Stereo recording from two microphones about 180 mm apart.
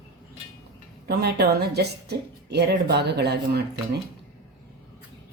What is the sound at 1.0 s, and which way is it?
A woman's voice, 65° right (ahead or behind).